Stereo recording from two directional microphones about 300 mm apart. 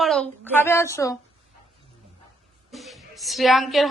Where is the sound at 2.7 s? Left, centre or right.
Centre.